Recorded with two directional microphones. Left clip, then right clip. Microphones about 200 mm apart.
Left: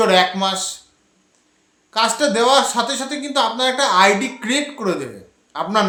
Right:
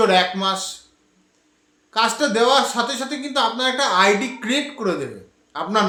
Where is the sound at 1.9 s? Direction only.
10° left (ahead or behind).